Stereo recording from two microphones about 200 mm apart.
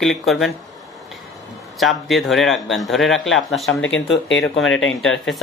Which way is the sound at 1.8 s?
Centre (ahead or behind).